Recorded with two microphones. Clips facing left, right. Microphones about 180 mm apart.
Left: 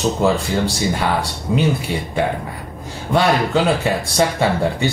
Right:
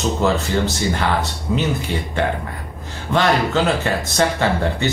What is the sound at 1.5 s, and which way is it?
Speech, 25° left (ahead or behind).